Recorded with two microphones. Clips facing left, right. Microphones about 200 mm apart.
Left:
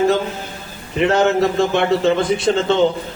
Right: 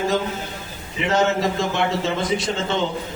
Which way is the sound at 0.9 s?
60° left (ahead or behind).